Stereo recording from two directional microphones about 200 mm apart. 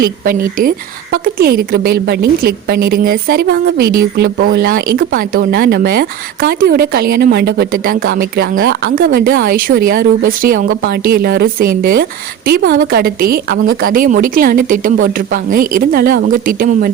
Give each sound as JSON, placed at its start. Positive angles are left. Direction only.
{"t": 0.3, "sound": "speech", "side_deg": -45}
{"t": 4.4, "sound": "speech", "side_deg": -70}
{"t": 4.6, "sound": "speech", "side_deg": -45}